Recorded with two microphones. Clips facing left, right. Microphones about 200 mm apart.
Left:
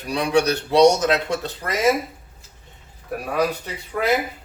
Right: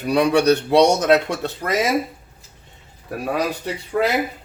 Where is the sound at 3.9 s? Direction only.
65° right (ahead or behind).